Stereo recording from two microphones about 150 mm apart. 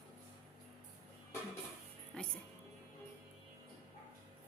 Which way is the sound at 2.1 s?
5° left (ahead or behind).